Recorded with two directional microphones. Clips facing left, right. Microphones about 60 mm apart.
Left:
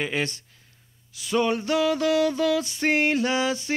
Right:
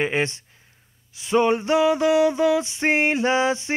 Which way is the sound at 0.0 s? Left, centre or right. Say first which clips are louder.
Right 4 dB; right.